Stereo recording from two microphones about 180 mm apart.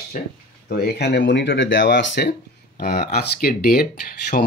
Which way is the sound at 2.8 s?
55° left (ahead or behind).